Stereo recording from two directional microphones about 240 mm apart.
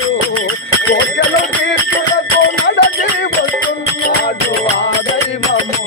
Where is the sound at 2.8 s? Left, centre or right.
Left.